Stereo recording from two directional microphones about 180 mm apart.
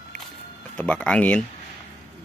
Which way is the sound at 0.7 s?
5° left (ahead or behind).